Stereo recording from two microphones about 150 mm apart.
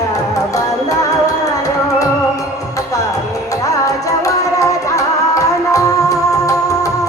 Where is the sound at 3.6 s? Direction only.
20° left (ahead or behind).